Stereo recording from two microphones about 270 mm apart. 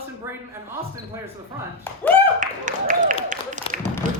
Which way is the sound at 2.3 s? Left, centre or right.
Right.